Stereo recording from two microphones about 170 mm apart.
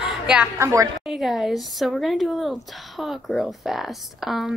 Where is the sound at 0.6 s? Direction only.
15° right (ahead or behind).